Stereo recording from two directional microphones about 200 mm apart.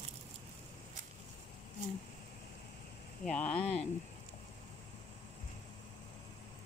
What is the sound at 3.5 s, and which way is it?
Speech, 30° left (ahead or behind).